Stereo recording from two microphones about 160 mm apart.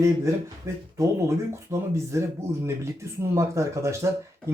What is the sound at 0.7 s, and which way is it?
Speech, 15° right (ahead or behind).